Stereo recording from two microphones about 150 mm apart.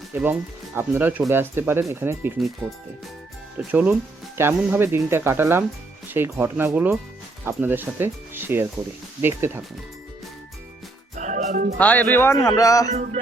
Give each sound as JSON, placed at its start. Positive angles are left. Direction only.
{"t": 0.1, "sound": "speech", "side_deg": -15}
{"t": 3.7, "sound": "speech", "side_deg": -10}
{"t": 11.1, "sound": "music", "side_deg": -55}
{"t": 11.8, "sound": "speech", "side_deg": 10}
{"t": 12.9, "sound": "music", "side_deg": -50}